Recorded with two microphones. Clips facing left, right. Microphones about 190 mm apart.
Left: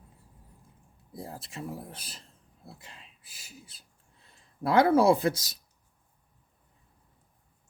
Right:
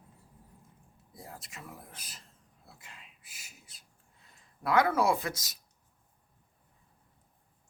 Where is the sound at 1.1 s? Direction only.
30° left (ahead or behind).